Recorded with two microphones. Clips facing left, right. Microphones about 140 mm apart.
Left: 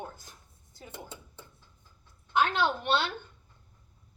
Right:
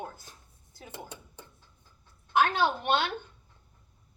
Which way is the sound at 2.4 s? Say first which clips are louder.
Even; 10° right (ahead or behind).